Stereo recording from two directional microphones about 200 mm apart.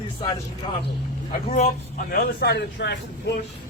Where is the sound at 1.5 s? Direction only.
40° left (ahead or behind); by 3.0 s 55° left (ahead or behind).